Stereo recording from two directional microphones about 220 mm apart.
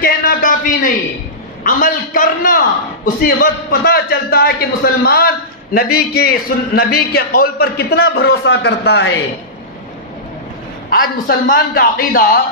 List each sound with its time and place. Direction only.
0.0 s a man's voice: 40° left (ahead or behind)
10.9 s a man's voice: 40° left (ahead or behind)